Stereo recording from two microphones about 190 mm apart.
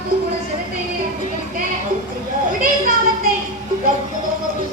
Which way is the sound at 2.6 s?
50° right (ahead or behind).